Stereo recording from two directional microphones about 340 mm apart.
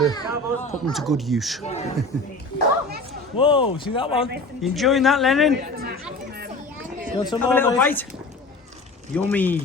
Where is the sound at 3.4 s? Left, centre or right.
Centre.